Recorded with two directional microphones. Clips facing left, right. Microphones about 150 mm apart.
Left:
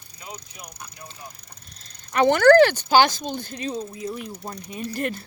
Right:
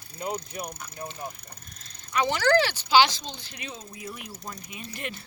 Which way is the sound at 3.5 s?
35° left (ahead or behind).